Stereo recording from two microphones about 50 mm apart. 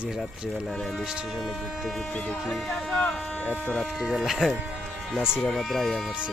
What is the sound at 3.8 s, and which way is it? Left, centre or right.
Speech, centre.